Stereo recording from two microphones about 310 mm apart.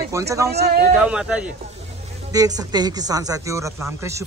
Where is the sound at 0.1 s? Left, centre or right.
Centre.